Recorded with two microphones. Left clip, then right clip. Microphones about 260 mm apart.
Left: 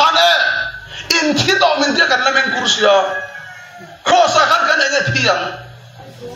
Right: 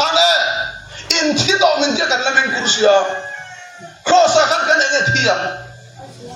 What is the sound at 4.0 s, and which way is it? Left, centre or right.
Cough, left.